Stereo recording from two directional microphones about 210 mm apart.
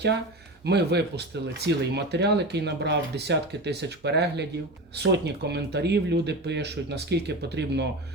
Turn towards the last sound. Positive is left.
turn(degrees=-55)  # may be behind; listen again after turning